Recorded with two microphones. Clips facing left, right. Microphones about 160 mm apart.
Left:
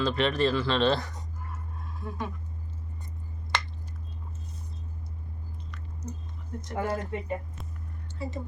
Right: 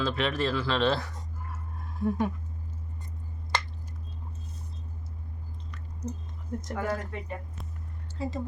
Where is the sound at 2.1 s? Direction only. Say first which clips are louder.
Right 8 dB; 45° right (ahead or behind).